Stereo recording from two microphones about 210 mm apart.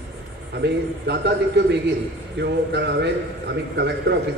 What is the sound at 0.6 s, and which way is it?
A man's voice, 55° right (ahead or behind).